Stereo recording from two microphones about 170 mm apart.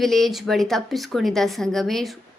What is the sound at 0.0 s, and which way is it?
A woman's voice, centre (ahead or behind).